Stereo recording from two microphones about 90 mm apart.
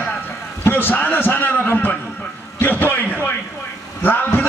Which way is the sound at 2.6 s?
20° left (ahead or behind).